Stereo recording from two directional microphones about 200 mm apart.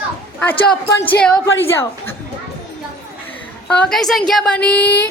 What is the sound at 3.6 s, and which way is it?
A woman's voice, 5° left (ahead or behind).